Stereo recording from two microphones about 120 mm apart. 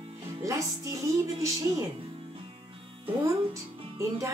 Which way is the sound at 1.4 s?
25° right (ahead or behind).